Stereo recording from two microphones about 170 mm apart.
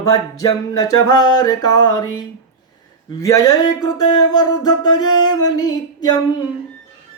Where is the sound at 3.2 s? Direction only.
20° left (ahead or behind).